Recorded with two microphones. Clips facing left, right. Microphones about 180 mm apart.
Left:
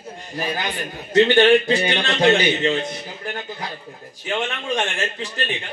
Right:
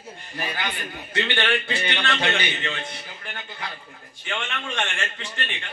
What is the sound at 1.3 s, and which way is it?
Speech, 25° left (ahead or behind).